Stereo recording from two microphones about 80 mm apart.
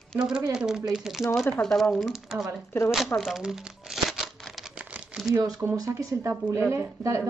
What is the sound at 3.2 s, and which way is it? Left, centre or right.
Crumpling, centre.